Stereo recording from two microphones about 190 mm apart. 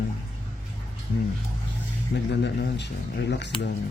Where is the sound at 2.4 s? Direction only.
65° left (ahead or behind).